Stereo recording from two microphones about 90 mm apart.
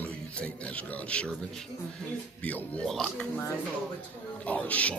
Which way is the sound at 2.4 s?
15° left (ahead or behind).